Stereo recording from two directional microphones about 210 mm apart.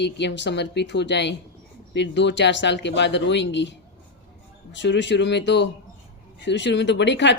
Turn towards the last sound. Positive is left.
turn(degrees=60)  # may be behind; listen again after turning